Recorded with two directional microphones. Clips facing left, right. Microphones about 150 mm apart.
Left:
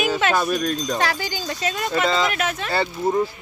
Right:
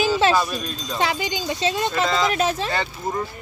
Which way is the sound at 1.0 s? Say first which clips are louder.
Right 1 dB; 20° right (ahead or behind).